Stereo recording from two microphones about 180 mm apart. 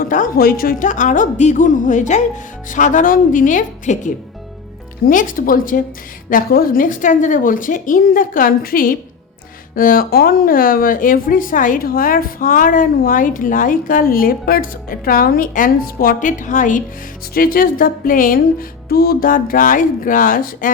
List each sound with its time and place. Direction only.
0.0 s speech: 50° left (ahead or behind)